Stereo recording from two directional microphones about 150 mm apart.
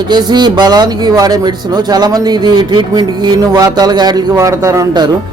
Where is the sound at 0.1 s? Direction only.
30° right (ahead or behind).